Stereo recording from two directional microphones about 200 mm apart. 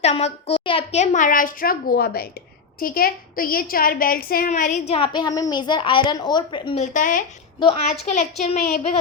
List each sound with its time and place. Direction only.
0.0 s a child's voice: 35° left (ahead or behind)
6.8 s a woman's voice: 40° left (ahead or behind)
7.6 s a woman's voice: 30° left (ahead or behind)